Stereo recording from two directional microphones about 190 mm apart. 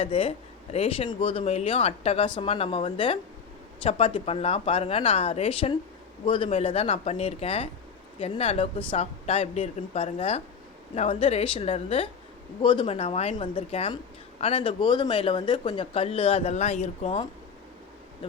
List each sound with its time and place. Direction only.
0.0 s speech: 30° left (ahead or behind)